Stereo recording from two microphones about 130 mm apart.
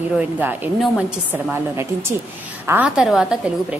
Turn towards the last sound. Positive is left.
turn(degrees=-5)  # may be behind; listen again after turning